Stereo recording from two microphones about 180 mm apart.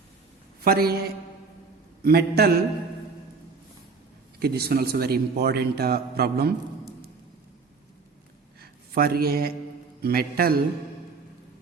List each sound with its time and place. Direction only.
0.6 s a man's voice: 60° right (ahead or behind)
2.0 s a man's voice: 60° right (ahead or behind)
4.4 s a man's voice: 60° right (ahead or behind)
8.6 s a man's voice: 60° right (ahead or behind)